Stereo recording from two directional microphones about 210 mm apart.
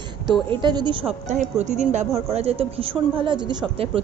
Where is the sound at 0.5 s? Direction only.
20° right (ahead or behind).